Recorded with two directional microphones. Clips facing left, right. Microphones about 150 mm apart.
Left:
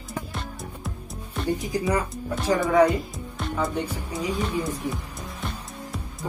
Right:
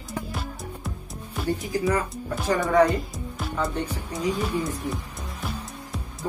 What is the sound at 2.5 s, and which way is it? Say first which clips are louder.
Speech: left 1 dB; 5° left (ahead or behind).